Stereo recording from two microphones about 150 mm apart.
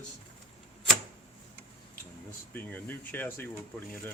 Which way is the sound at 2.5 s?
10° left (ahead or behind).